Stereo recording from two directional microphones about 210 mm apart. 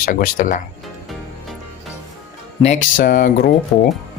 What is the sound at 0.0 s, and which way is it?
Speech, 40° left (ahead or behind).